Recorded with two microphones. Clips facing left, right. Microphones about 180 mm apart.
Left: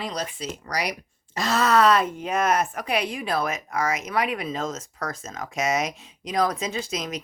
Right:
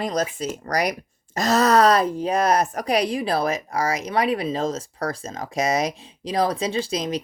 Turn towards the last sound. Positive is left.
turn(degrees=-30)  # may be behind; listen again after turning